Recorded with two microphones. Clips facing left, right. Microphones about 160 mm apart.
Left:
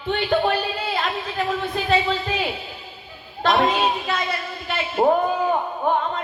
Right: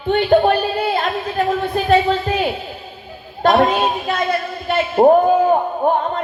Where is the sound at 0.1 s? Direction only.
45° right (ahead or behind).